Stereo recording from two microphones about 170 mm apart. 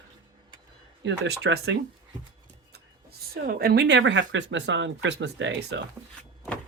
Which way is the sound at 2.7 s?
65° right (ahead or behind).